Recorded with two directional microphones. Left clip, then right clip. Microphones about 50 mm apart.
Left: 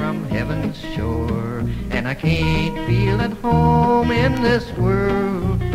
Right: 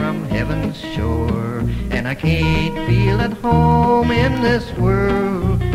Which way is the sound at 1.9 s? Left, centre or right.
Right.